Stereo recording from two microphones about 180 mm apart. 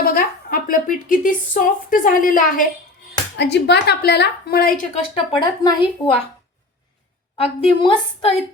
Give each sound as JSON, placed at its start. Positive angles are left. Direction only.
{"t": 0.0, "sound": "a woman's voice", "side_deg": 50}
{"t": 3.3, "sound": "a woman's voice", "side_deg": 70}
{"t": 5.4, "sound": "a woman's voice", "side_deg": 25}
{"t": 7.3, "sound": "a woman's voice", "side_deg": 30}